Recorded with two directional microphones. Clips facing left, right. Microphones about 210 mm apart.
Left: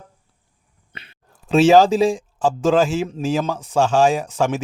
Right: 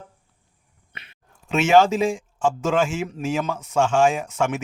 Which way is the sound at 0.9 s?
30° left (ahead or behind).